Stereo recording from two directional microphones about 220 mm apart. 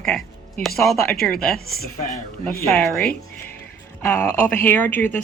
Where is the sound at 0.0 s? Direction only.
Centre (ahead or behind).